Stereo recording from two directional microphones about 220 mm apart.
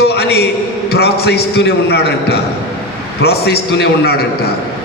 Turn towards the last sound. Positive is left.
turn(degrees=45)  # may be behind; listen again after turning